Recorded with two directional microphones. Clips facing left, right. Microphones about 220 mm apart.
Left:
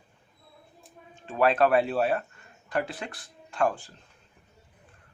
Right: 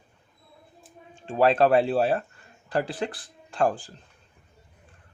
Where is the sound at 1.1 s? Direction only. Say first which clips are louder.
Right 3 dB; 30° right (ahead or behind).